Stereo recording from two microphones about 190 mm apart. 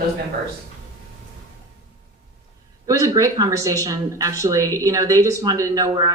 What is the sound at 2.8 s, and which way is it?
Speech, 15° right (ahead or behind).